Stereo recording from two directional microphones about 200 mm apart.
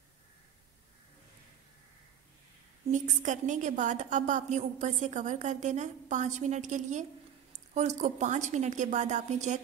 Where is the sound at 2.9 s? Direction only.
40° right (ahead or behind).